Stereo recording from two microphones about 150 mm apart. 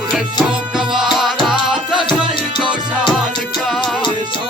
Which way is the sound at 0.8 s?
Centre (ahead or behind).